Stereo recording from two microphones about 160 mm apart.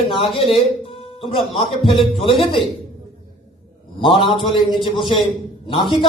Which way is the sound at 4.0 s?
35° left (ahead or behind).